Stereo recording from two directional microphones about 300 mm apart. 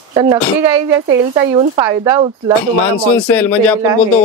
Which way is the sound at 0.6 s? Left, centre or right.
Centre.